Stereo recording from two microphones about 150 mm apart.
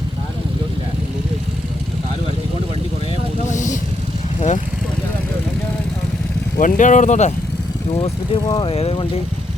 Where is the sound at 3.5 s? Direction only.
55° left (ahead or behind).